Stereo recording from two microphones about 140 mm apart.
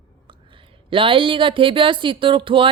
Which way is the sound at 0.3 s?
35° right (ahead or behind).